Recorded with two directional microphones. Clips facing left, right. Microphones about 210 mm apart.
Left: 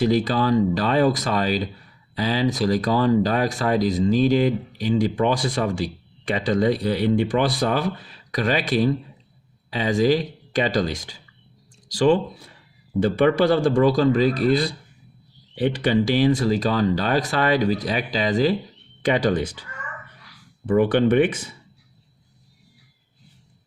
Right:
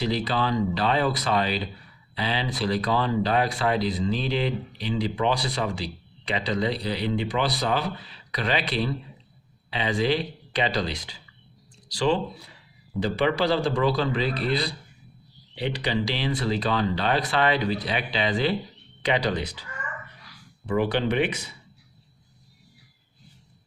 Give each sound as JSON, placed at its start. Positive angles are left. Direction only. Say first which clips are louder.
{"t": 0.0, "sound": "speech", "louder": "left 6 dB", "side_deg": 45}
{"t": 20.7, "sound": "speech", "louder": "left 7 dB", "side_deg": 50}